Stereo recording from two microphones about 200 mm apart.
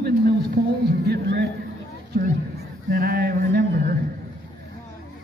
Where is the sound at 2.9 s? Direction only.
50° right (ahead or behind).